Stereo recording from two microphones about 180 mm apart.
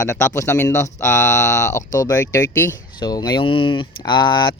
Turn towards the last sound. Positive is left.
turn(degrees=25)  # may be behind; listen again after turning